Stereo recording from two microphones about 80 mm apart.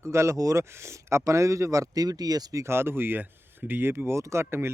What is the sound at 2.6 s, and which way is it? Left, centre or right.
Speech, right.